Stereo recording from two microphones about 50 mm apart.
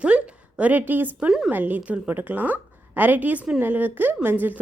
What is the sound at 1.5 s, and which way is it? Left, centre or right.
A woman's voice, right.